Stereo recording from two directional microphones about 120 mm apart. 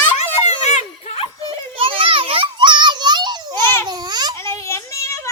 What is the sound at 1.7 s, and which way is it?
Children playing, 50° right (ahead or behind).